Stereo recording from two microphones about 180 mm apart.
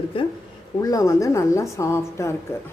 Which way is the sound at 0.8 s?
20° left (ahead or behind).